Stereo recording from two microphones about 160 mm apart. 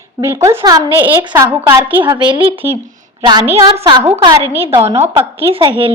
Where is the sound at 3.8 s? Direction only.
25° right (ahead or behind).